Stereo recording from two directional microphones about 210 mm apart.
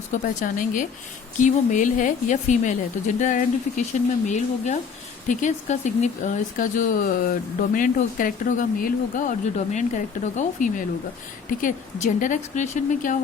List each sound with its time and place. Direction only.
0.1 s speech: 35° left (ahead or behind)